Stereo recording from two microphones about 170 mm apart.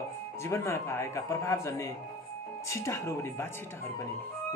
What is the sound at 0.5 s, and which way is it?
Speech, 15° left (ahead or behind).